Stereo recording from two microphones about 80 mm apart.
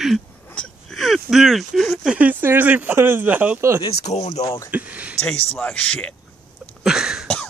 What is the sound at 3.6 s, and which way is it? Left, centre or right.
Speech, right.